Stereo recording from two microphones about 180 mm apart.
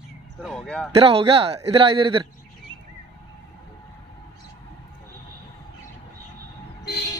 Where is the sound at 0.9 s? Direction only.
30° right (ahead or behind).